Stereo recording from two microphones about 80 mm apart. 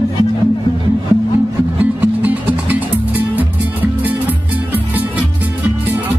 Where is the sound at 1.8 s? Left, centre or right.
Right.